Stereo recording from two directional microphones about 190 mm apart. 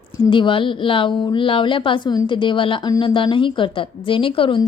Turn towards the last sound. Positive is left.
turn(degrees=25)  # may be behind; listen again after turning